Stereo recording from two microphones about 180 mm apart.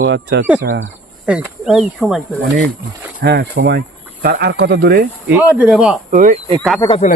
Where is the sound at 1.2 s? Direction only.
5° right (ahead or behind).